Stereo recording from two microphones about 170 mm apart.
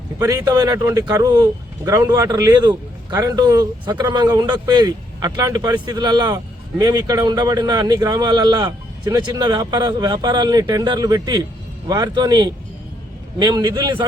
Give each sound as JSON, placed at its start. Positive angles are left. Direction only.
{"t": 0.2, "sound": "speech", "side_deg": -20}